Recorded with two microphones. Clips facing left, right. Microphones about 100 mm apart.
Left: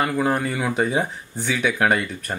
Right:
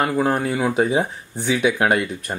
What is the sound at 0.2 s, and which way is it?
Speech, 5° right (ahead or behind).